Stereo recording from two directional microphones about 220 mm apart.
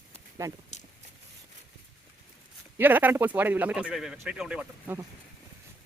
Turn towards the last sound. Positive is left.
turn(degrees=-5)  # may be behind; listen again after turning